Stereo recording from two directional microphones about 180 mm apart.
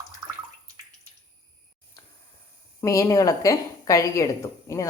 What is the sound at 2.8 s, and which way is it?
A woman's voice, 15° left (ahead or behind).